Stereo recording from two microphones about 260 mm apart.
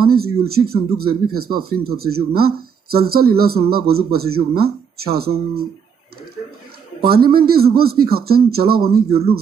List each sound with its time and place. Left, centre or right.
0.0 s speech: right
7.0 s speech: right